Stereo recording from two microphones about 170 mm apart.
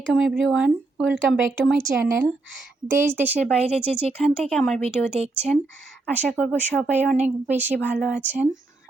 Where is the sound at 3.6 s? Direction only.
40° right (ahead or behind).